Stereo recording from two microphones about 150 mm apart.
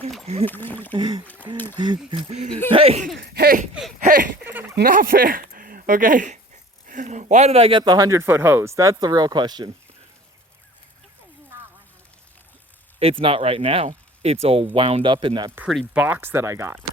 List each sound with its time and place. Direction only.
0.4 s speech: 10° left (ahead or behind)
0.9 s speech: 30° right (ahead or behind)
1.2 s speech: 10° left (ahead or behind)
2.7 s speech: 40° right (ahead or behind)
3.2 s a sound: 90° right
4.1 s speech: 65° right (ahead or behind); by 9.6 s 30° right (ahead or behind)
13.0 s speech: 40° right (ahead or behind)
15.9 s speech: 10° right (ahead or behind)